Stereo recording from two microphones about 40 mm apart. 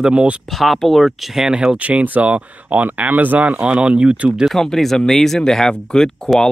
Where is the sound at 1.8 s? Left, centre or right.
Right.